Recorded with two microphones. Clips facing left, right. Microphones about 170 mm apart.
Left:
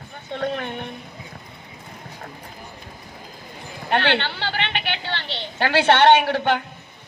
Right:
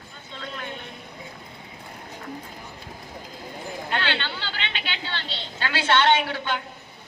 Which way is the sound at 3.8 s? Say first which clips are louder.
Left 8 dB; 65° left (ahead or behind).